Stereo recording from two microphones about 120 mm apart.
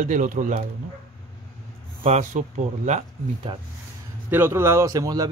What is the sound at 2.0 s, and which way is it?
Speech, 80° right.